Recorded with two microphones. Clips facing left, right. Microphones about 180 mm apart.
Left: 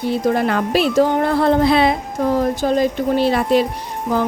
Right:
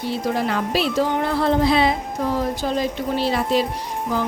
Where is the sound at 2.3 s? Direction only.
50° left (ahead or behind).